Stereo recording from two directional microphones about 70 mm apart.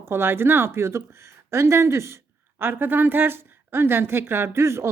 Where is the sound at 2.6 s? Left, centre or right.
Right.